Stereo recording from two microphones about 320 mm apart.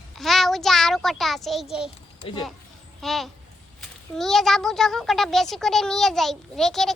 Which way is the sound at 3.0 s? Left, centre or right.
Centre.